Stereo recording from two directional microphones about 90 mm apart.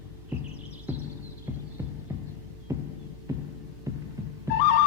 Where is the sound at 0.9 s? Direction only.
20° right (ahead or behind).